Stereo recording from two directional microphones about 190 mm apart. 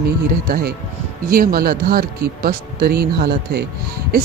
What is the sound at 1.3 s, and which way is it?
Speech, 50° right (ahead or behind).